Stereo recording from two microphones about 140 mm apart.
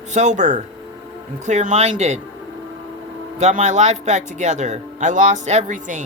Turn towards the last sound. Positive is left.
turn(degrees=-65)  # may be behind; listen again after turning